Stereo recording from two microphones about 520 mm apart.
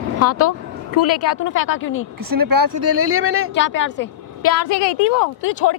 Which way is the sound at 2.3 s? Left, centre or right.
Right.